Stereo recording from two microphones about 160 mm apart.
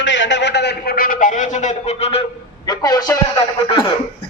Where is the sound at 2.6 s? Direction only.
25° left (ahead or behind).